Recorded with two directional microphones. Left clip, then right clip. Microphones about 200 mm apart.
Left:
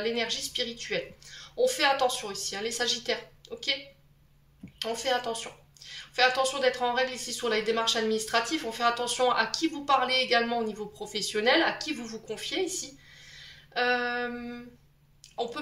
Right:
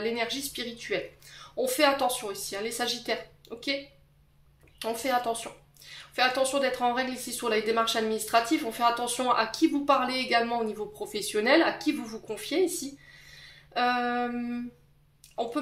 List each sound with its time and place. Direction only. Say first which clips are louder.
0.0 s speech: even; 50° right (ahead or behind)
4.7 s speech: right 1 dB; 50° right (ahead or behind)
13.7 s speech: right 1 dB; 50° right (ahead or behind)